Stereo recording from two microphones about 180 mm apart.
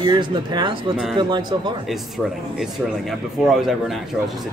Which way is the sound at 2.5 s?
Centre (ahead or behind).